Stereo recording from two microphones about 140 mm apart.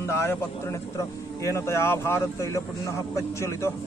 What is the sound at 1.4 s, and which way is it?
Speech, 20° left (ahead or behind).